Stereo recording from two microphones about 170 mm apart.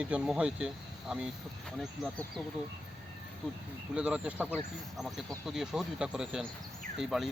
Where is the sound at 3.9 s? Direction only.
5° right (ahead or behind).